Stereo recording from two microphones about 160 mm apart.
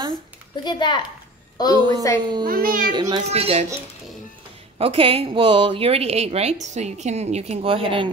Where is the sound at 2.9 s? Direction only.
25° right (ahead or behind).